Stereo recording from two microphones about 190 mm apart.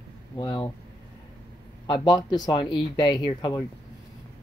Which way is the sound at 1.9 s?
25° left (ahead or behind).